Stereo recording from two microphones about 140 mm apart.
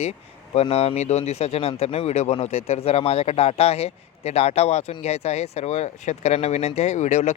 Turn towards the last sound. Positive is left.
turn(degrees=55)  # may be behind; listen again after turning